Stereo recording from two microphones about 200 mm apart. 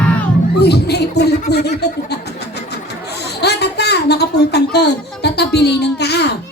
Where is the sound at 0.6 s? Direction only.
55° left (ahead or behind).